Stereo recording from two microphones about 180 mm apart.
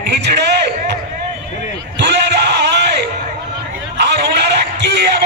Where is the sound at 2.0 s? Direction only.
70° right (ahead or behind).